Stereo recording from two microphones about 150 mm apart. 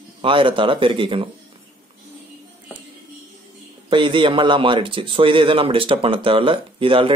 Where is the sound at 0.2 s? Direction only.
35° right (ahead or behind).